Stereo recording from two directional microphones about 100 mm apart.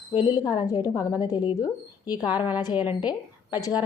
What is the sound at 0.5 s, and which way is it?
Speech, 40° left (ahead or behind).